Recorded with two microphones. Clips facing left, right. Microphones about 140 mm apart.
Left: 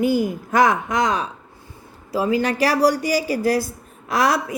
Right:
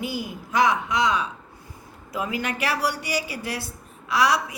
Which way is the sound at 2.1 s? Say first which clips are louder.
Left 8 dB; 35° left (ahead or behind).